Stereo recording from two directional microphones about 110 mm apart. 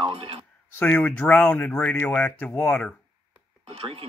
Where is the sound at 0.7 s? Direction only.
15° left (ahead or behind).